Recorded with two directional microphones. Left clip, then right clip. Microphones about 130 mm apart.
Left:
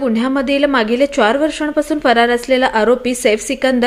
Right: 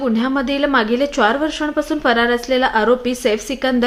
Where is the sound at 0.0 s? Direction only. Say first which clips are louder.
Left 2 dB; 25° left (ahead or behind).